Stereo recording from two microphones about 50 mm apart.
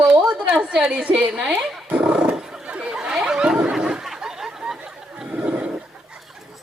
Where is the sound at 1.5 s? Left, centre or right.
Right.